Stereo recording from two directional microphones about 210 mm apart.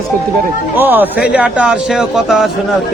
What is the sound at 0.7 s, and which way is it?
Speech, 10° right (ahead or behind).